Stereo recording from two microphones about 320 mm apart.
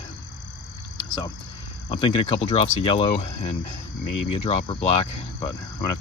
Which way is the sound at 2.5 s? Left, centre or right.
Centre.